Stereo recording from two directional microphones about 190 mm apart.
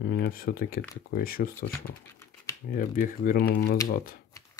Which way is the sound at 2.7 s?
50° left (ahead or behind).